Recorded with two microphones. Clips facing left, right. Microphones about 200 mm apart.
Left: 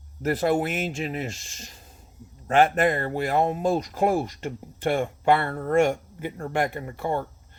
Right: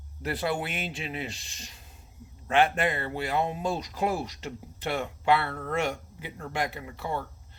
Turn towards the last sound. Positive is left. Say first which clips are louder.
# left 6 dB
turn(degrees=50)  # may be behind; listen again after turning